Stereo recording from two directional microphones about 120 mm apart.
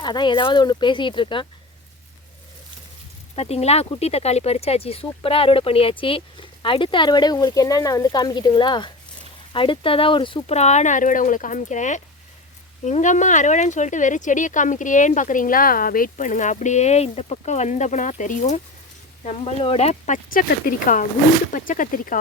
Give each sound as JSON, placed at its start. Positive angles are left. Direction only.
{"t": 0.0, "sound": "speech", "side_deg": 35}
{"t": 3.3, "sound": "speech", "side_deg": 60}
{"t": 10.4, "sound": "speech", "side_deg": 65}
{"t": 19.2, "sound": "speech", "side_deg": 65}
{"t": 20.7, "sound": "speech", "side_deg": 90}